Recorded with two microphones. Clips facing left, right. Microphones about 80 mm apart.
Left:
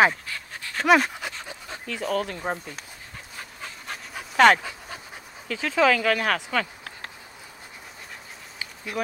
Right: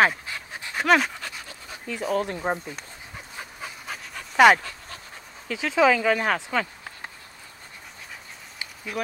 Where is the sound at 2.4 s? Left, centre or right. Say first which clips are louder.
Right 2 dB; centre.